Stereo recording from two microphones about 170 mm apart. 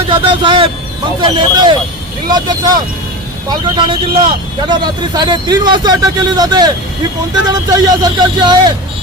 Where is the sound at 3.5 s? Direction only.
30° right (ahead or behind).